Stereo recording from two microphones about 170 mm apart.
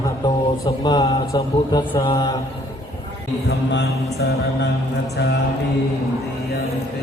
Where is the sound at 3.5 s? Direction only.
80° left.